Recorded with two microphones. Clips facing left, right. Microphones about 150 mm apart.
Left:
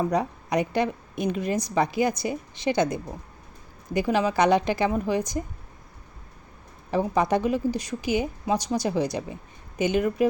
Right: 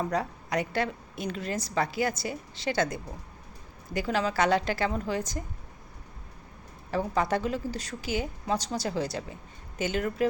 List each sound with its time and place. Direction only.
0.0 s a woman's voice: 15° left (ahead or behind)
6.9 s a woman's voice: 15° left (ahead or behind)